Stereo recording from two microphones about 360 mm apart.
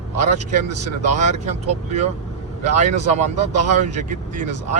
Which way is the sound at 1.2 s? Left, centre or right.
Centre.